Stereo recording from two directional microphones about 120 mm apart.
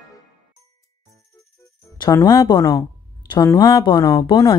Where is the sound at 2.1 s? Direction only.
30° left (ahead or behind).